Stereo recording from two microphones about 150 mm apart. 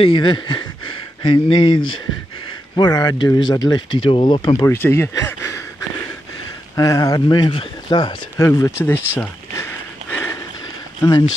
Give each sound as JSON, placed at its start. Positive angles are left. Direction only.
{"t": 0.0, "sound": "speech", "side_deg": 35}
{"t": 4.6, "sound": "speech", "side_deg": 15}
{"t": 6.7, "sound": "speech", "side_deg": 20}